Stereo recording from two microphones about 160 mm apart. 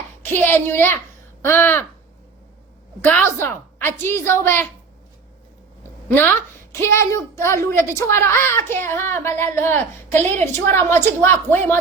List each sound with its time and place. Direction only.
0.3 s child singing: 15° left (ahead or behind)
3.0 s child singing: 10° left (ahead or behind)
6.1 s child singing: 10° left (ahead or behind)